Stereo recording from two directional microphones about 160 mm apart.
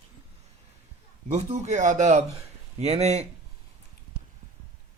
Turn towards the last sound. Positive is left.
turn(degrees=-40)  # may be behind; listen again after turning